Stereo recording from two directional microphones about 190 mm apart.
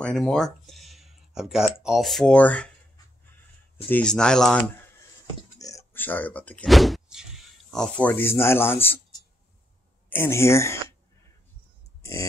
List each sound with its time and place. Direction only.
0.0 s speech: 5° left (ahead or behind)
3.7 s speech: 5° left (ahead or behind)
5.2 s speech: 15° left (ahead or behind)
10.0 s speech: 10° left (ahead or behind)
12.0 s a sound: 15° left (ahead or behind)